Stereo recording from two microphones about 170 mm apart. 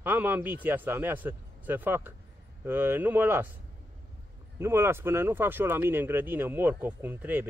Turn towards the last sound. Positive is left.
turn(degrees=-10)  # may be behind; listen again after turning